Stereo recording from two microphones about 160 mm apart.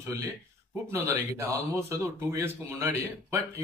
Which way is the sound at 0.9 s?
15° right (ahead or behind).